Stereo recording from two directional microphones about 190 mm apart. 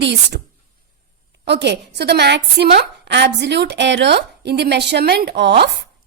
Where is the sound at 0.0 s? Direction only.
65° right (ahead or behind).